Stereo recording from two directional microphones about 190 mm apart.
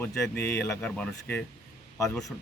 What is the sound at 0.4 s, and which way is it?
Speech, 5° left (ahead or behind).